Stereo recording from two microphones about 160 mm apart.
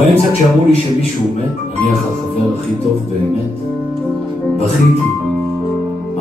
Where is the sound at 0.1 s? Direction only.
40° left (ahead or behind).